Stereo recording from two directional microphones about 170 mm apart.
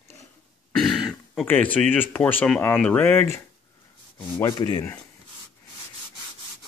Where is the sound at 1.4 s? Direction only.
10° left (ahead or behind).